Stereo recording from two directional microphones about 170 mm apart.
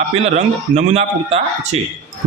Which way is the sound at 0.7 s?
40° right (ahead or behind).